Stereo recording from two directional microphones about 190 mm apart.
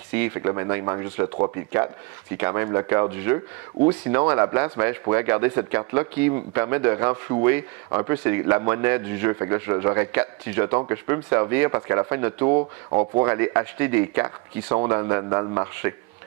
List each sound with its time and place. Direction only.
0.1 s a man's voice: 15° right (ahead or behind)
2.3 s a man's voice: 15° right (ahead or behind)
12.4 s speech: 30° right (ahead or behind)
13.2 s a man's voice: 15° right (ahead or behind)